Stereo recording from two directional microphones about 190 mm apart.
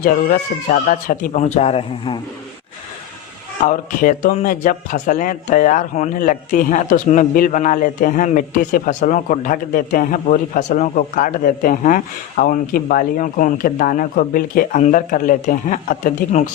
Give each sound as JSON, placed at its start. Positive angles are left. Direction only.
{"t": 0.0, "sound": "speech", "side_deg": 50}
{"t": 3.6, "sound": "speech", "side_deg": 40}